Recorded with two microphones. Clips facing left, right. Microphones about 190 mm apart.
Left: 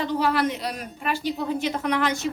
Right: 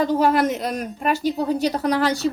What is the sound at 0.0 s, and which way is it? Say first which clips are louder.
A woman's voice: right 5 dB; 45° right (ahead or behind).